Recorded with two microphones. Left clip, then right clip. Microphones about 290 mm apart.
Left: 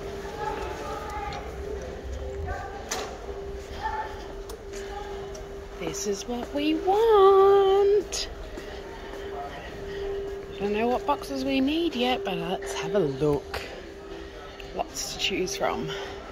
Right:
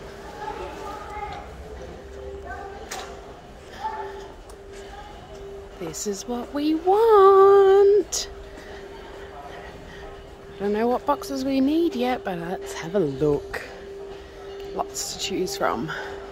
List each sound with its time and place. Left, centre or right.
5.9 s speech: centre
7.7 s a sound: right
10.7 s speech: right
14.8 s speech: centre